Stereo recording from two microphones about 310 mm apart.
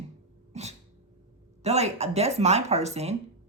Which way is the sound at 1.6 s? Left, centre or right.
Right.